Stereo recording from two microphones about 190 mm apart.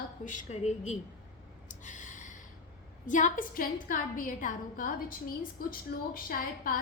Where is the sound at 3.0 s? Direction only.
40° left (ahead or behind).